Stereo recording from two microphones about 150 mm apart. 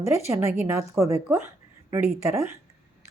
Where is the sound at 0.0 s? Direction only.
20° right (ahead or behind).